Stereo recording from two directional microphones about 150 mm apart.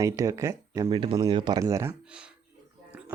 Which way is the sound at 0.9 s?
35° right (ahead or behind).